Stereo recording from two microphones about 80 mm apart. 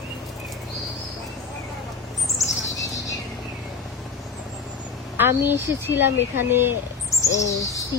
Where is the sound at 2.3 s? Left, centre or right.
Left.